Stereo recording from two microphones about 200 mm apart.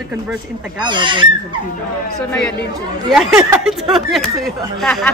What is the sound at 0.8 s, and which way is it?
Speech, 25° right (ahead or behind).